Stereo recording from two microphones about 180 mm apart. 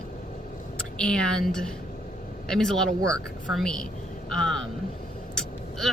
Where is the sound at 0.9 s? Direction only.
5° left (ahead or behind).